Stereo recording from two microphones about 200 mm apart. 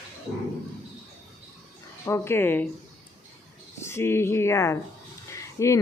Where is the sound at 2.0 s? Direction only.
10° left (ahead or behind).